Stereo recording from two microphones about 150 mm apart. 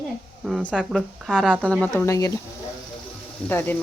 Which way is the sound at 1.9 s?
20° left (ahead or behind).